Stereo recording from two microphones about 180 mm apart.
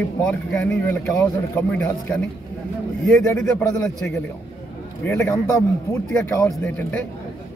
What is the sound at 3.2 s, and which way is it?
A man's voice, 10° left (ahead or behind).